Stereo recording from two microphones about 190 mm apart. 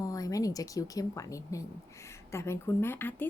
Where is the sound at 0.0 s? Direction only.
15° left (ahead or behind).